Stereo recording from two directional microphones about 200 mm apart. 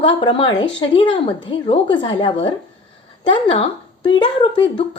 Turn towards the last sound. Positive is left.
turn(degrees=25)  # may be behind; listen again after turning